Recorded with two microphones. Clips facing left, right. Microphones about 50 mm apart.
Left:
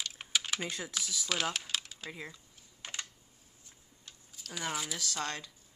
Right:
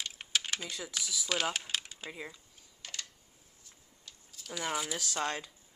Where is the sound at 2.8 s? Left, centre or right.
Left.